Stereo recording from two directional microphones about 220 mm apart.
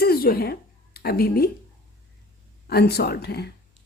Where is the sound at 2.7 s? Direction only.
45° left (ahead or behind).